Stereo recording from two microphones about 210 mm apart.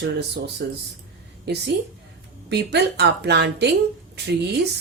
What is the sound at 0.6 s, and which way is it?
A woman's voice, 50° right (ahead or behind).